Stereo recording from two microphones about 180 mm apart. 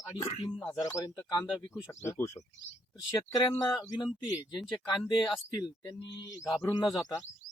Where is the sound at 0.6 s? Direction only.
20° left (ahead or behind).